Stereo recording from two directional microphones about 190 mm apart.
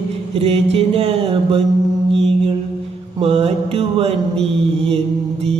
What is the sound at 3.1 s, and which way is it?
Mantra, 30° right (ahead or behind).